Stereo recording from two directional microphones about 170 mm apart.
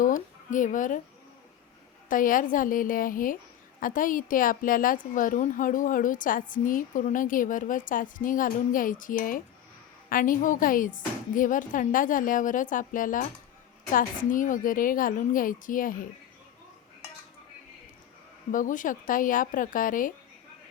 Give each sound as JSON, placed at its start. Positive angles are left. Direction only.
{"t": 0.0, "sound": "speech", "side_deg": 50}
{"t": 2.0, "sound": "a woman's voice", "side_deg": 55}
{"t": 18.5, "sound": "a woman's voice", "side_deg": 50}